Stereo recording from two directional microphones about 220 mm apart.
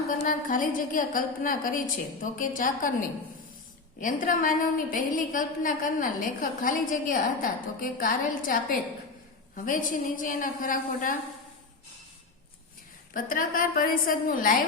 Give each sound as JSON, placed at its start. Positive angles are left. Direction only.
{"t": 0.1, "sound": "a woman's voice", "side_deg": 40}
{"t": 4.0, "sound": "a woman's voice", "side_deg": 35}
{"t": 13.1, "sound": "a woman's voice", "side_deg": 40}